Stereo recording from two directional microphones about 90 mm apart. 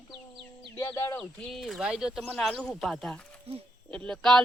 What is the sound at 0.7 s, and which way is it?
Speech, 30° left (ahead or behind).